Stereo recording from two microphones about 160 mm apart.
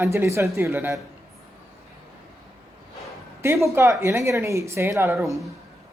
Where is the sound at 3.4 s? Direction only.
15° right (ahead or behind).